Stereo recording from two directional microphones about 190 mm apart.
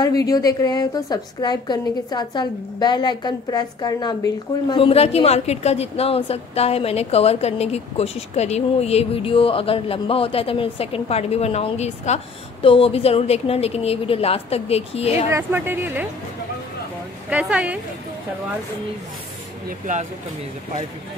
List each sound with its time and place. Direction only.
0.0 s a woman's voice: 20° left (ahead or behind)
15.3 s a woman's voice: 10° right (ahead or behind)
17.3 s a woman's voice: 5° right (ahead or behind)